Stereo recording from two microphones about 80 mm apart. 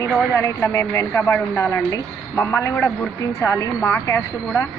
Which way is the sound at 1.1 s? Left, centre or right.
Left.